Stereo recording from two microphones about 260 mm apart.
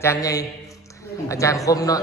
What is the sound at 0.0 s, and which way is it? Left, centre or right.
A man's voice, centre.